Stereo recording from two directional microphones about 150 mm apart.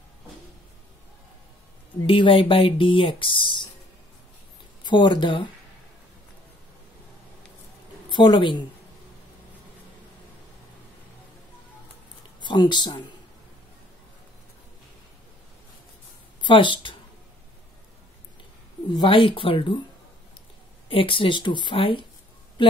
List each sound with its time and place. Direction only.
2.0 s speech: 35° left (ahead or behind)
4.8 s speech: 30° left (ahead or behind)
8.1 s speech: 30° left (ahead or behind)
12.4 s speech: 30° left (ahead or behind)
16.3 s speech: 30° left (ahead or behind)
18.9 s speech: 35° left (ahead or behind)
20.9 s speech: 35° left (ahead or behind)